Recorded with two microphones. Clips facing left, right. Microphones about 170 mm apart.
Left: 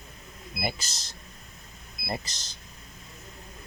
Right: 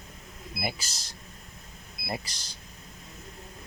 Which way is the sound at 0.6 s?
10° right (ahead or behind).